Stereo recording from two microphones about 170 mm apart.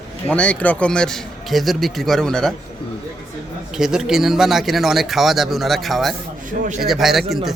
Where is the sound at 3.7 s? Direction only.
5° right (ahead or behind).